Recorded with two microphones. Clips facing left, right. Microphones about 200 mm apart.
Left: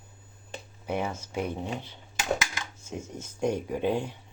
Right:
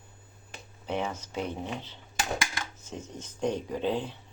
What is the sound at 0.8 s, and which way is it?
Speech, 10° left (ahead or behind).